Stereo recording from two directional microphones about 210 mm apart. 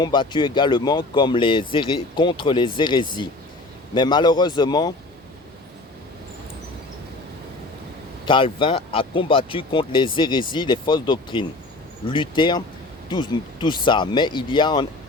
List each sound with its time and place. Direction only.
0.0 s speech: 20° left (ahead or behind)
8.2 s speech: 25° left (ahead or behind)